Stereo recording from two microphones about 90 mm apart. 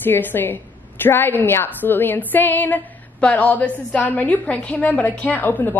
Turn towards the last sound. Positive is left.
turn(degrees=20)  # may be behind; listen again after turning